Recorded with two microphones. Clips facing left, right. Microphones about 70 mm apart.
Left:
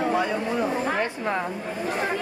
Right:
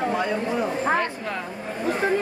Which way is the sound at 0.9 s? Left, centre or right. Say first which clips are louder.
Left 1 dB; left.